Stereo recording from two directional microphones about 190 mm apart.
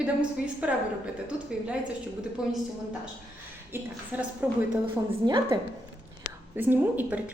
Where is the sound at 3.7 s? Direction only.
10° right (ahead or behind).